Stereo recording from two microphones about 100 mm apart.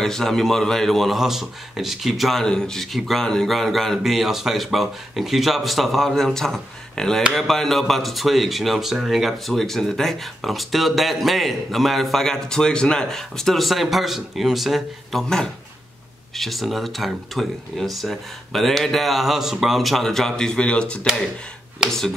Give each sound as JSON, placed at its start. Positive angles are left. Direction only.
{"t": 0.0, "sound": "speech", "side_deg": 5}